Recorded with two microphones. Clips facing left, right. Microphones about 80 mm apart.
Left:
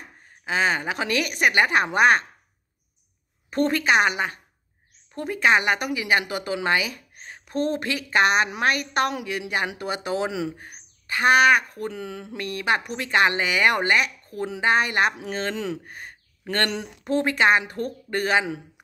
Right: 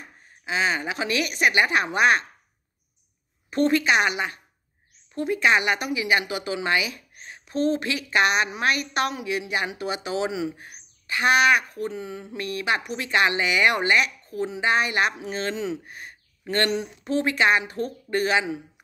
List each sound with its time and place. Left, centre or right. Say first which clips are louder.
0.5 s speech: left 2 dB; left
3.4 s a woman's voice: right 1 dB; left
8.5 s speech: left 1 dB; left
9.1 s speech: even; left
10.6 s speech: left 1 dB; left
11.9 s speech: even; left
15.1 s speech: even; left
15.9 s a sound: left 1 dB; left
16.7 s speech: even; left